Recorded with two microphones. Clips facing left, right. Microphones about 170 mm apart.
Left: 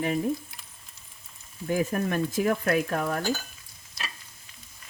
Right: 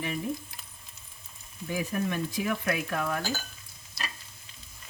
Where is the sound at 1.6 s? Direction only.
50° left (ahead or behind).